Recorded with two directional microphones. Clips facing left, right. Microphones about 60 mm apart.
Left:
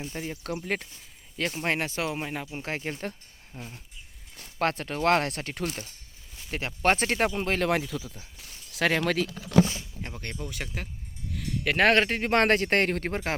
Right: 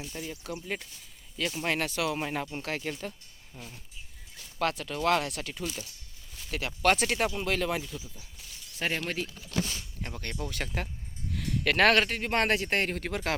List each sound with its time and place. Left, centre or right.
0.0 s speech: left
0.9 s speech: left
2.1 s speech: centre
2.6 s speech: left
3.5 s a sound: left
4.6 s speech: left
6.3 s speech: left
8.7 s speech: left
9.6 s speech: left
10.5 s speech: centre
11.6 s speech: centre
11.9 s speech: left
12.3 s speech: left
13.1 s speech: left